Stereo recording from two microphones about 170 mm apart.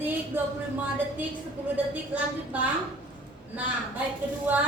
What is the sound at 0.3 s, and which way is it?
Speech, 10° right (ahead or behind).